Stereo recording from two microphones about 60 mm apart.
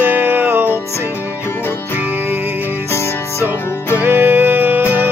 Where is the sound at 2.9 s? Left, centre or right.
Left.